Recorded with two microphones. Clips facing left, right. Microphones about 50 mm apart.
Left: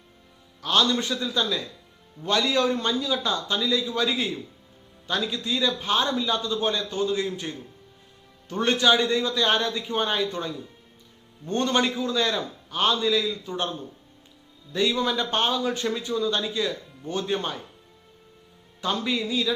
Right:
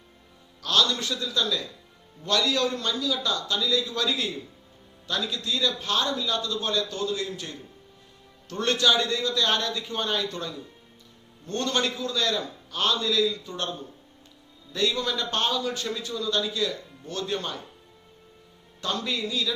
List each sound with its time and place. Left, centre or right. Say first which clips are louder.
0.6 s speech: left 2 dB; centre
14.7 s speech: left 3 dB; centre
18.8 s speech: left 3 dB; centre